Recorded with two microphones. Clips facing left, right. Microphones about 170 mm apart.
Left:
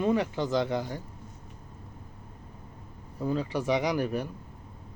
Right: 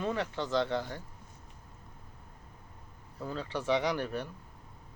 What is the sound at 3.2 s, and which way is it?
Speech, 15° left (ahead or behind).